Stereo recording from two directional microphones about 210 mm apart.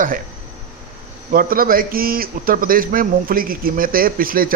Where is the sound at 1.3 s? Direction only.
45° right (ahead or behind).